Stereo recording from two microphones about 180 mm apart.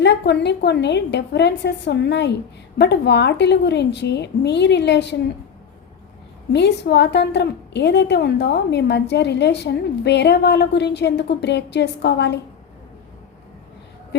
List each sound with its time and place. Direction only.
0.0 s a woman's voice: 75° left (ahead or behind)
6.5 s a woman's voice: 70° left (ahead or behind)